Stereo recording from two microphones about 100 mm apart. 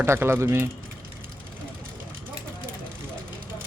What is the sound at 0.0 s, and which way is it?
Speech, 25° right (ahead or behind).